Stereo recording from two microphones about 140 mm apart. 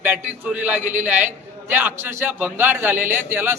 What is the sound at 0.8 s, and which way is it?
Speech, 60° right (ahead or behind).